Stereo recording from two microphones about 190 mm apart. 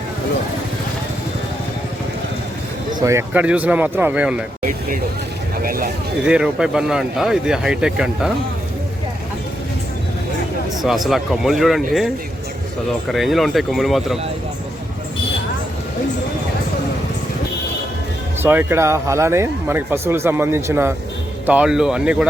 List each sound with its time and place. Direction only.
3.0 s speech: 15° right (ahead or behind)
5.6 s a sound: 50° right (ahead or behind)
6.2 s speech: 5° right (ahead or behind)
10.8 s speech: centre (ahead or behind)
18.4 s speech: 10° right (ahead or behind)